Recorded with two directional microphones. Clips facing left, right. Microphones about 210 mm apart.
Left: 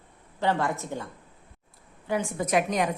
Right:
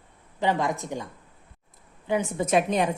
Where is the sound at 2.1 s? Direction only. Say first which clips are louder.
Right 2 dB; 20° right (ahead or behind).